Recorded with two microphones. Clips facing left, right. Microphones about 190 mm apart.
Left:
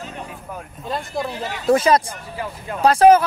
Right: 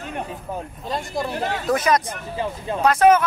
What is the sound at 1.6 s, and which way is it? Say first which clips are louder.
Speech: left 5 dB; 30° left (ahead or behind).